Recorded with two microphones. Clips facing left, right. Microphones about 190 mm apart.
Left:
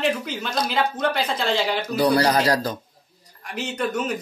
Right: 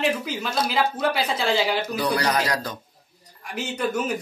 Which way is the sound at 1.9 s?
35° left (ahead or behind).